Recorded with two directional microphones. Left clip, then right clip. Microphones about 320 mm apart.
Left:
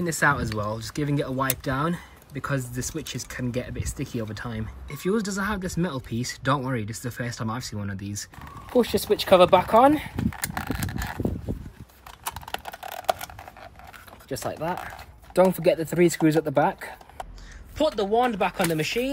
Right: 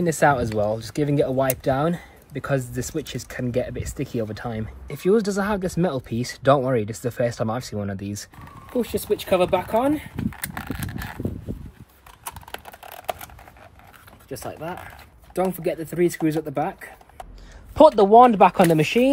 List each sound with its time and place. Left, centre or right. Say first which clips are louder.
0.0 s speech: right 4 dB; centre
8.7 s speech: left 2 dB; centre
10.1 s a sound: left 1 dB; centre
12.3 s typing: left 3 dB; centre
14.3 s speech: left 3 dB; left
17.7 s speech: right 11 dB; centre